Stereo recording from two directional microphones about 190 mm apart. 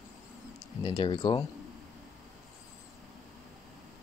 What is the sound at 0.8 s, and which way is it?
Speech, 25° left (ahead or behind).